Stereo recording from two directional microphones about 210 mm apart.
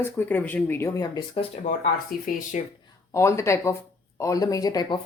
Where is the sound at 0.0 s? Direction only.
10° left (ahead or behind).